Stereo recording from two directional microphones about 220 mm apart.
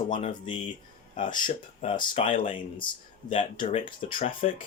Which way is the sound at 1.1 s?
20° left (ahead or behind).